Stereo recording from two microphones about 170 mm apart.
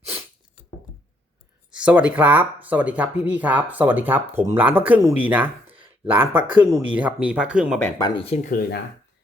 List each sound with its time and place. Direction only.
1.8 s speech: 10° right (ahead or behind)
7.8 s speech: 10° left (ahead or behind)
8.0 s speech: 30° left (ahead or behind)